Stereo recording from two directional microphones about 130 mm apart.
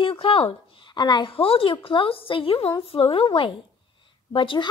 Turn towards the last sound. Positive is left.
turn(degrees=40)  # may be behind; listen again after turning